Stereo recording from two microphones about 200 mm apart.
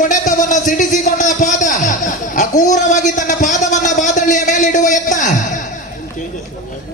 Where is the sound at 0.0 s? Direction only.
40° left (ahead or behind).